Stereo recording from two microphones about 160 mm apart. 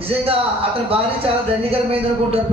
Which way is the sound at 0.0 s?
35° right (ahead or behind).